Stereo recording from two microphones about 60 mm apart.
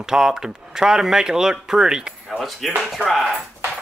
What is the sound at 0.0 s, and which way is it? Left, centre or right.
Speech, centre.